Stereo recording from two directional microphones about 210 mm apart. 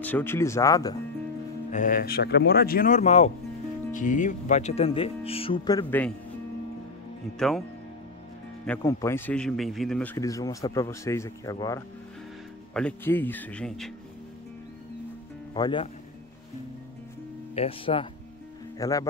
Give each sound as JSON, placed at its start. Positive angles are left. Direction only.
{"t": 0.0, "sound": "speech", "side_deg": 10}
{"t": 1.7, "sound": "speech", "side_deg": 40}
{"t": 5.9, "sound": "speech", "side_deg": 10}
{"t": 7.3, "sound": "a man's voice", "side_deg": 0}
{"t": 8.6, "sound": "a man's voice", "side_deg": 10}
{"t": 15.5, "sound": "speech", "side_deg": 20}
{"t": 17.6, "sound": "speech", "side_deg": 25}
{"t": 18.8, "sound": "speech", "side_deg": 15}